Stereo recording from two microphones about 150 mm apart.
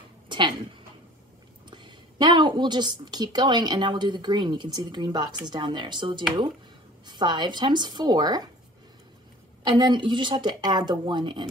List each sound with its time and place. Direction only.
0.3 s a sound: 30° right (ahead or behind)
1.7 s a woman's voice: 30° right (ahead or behind)
9.6 s a woman's voice: 30° right (ahead or behind)